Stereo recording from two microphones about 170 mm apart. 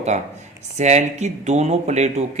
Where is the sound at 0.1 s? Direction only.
40° right (ahead or behind).